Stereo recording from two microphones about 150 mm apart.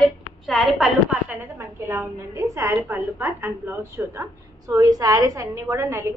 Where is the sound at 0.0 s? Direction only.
Centre (ahead or behind).